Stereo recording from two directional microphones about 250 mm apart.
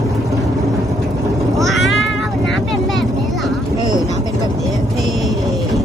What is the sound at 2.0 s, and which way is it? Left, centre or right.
Vehicle, left.